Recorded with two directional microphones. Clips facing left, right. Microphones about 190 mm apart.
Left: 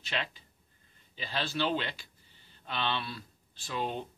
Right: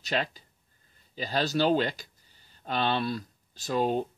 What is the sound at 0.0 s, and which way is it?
Speech, 40° right (ahead or behind).